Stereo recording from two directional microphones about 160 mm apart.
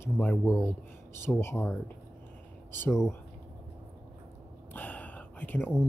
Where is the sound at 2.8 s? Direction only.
15° left (ahead or behind).